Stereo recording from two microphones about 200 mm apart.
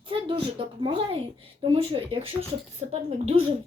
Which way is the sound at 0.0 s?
25° right (ahead or behind).